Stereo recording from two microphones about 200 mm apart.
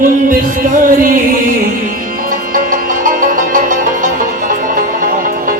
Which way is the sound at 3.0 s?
45° right (ahead or behind).